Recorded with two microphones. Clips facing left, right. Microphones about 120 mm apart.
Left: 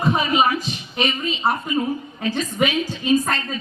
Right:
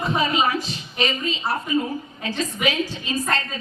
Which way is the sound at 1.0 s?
35° right (ahead or behind).